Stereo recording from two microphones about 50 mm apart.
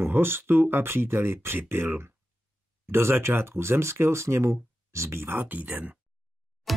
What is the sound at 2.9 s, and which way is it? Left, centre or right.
Speech, right.